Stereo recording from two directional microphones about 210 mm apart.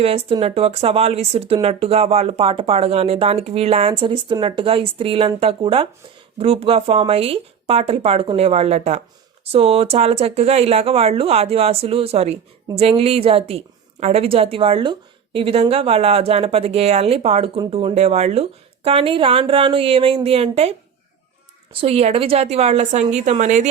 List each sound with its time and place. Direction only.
0.0 s a woman's voice: 25° right (ahead or behind)